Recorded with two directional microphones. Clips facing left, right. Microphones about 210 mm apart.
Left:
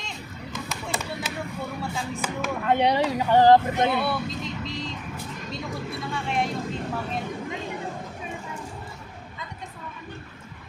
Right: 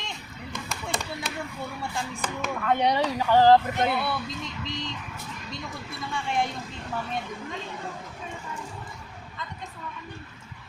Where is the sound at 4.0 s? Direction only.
Centre (ahead or behind).